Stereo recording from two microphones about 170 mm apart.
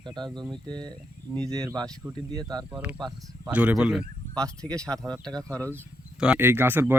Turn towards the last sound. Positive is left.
turn(degrees=-10)  # may be behind; listen again after turning